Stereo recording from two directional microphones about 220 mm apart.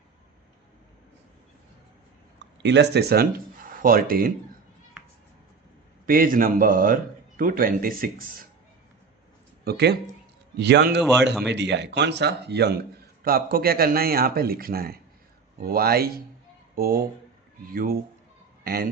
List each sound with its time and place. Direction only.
2.6 s speech: 50° right (ahead or behind)
6.1 s speech: 40° right (ahead or behind)
9.6 s speech: 45° right (ahead or behind)